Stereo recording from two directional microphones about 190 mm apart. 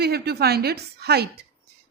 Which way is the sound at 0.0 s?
55° right (ahead or behind).